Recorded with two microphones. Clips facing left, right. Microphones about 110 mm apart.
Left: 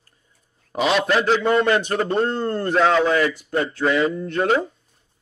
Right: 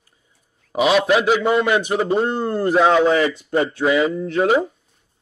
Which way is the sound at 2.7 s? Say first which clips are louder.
Right 2 dB; 15° right (ahead or behind).